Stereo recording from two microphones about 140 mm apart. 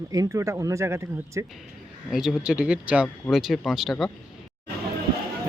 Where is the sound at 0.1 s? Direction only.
25° right (ahead or behind).